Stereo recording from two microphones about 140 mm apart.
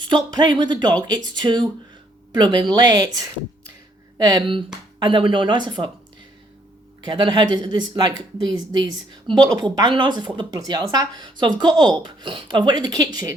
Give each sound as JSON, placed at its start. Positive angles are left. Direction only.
{"t": 0.0, "sound": "speech", "side_deg": -30}
{"t": 7.0, "sound": "speech", "side_deg": -30}